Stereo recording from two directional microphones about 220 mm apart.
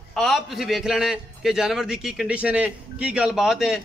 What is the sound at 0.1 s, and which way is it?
A man's voice, centre (ahead or behind).